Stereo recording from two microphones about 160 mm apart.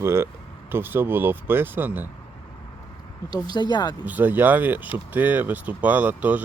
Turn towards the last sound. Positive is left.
turn(degrees=-10)  # may be behind; listen again after turning